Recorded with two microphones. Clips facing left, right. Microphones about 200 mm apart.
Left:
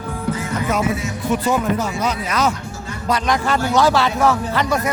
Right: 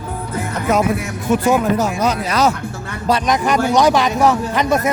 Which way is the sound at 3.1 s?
20° right (ahead or behind).